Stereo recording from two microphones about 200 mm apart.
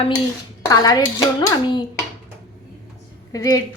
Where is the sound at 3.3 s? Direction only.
20° left (ahead or behind).